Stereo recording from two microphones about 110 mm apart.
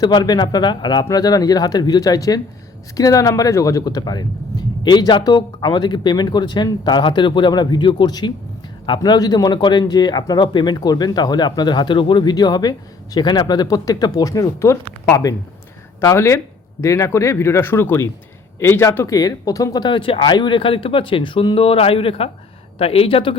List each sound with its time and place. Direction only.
0.0 s speech: 40° left (ahead or behind); by 23.4 s 55° left (ahead or behind)